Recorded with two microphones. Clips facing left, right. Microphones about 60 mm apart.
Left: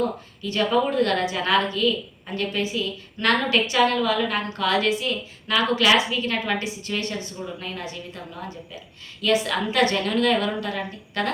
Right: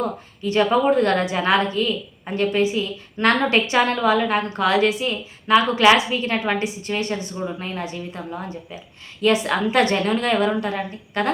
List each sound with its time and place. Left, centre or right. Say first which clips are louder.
0.4 s a woman's voice: right 4 dB; right
9.2 s a woman's voice: right 3 dB; right